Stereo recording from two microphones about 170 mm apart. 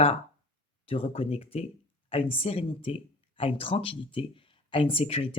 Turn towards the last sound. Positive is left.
turn(degrees=35)  # may be behind; listen again after turning